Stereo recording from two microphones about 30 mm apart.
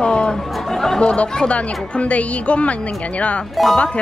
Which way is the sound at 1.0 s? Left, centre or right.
Left.